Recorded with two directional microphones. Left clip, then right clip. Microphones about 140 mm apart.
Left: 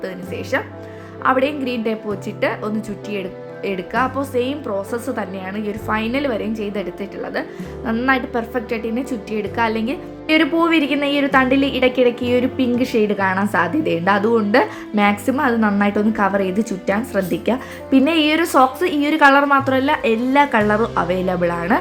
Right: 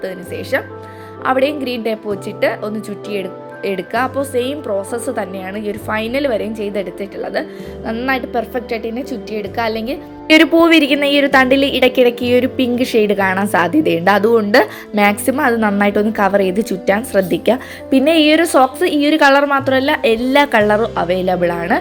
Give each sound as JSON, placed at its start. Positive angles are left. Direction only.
{"t": 0.0, "sound": "a woman's voice", "side_deg": -25}
{"t": 10.2, "sound": "a woman's voice", "side_deg": -45}